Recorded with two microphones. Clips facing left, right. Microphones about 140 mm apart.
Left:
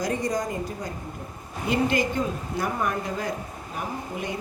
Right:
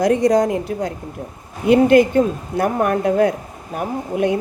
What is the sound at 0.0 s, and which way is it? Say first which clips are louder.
Speech: right 12 dB; 70° right (ahead or behind).